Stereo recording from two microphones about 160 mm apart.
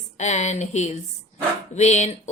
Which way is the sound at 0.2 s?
45° left (ahead or behind).